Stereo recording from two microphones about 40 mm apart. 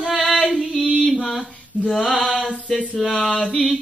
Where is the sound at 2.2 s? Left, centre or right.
Centre.